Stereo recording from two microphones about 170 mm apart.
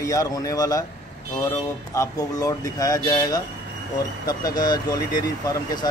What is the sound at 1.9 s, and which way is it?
Speech, 20° left (ahead or behind).